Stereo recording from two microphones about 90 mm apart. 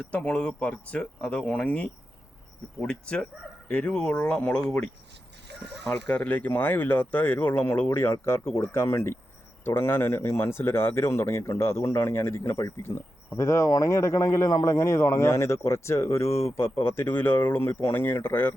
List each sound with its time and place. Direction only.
0.0 s speech: 15° left (ahead or behind)